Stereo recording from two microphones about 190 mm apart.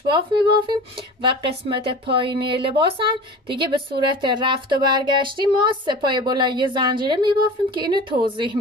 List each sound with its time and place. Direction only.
0.1 s a woman's voice: 25° right (ahead or behind)